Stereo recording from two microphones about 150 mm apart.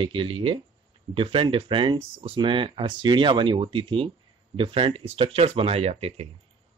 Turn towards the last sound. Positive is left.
turn(degrees=-45)  # may be behind; listen again after turning